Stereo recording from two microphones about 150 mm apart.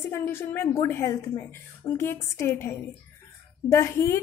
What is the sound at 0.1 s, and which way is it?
A woman's voice, 15° left (ahead or behind).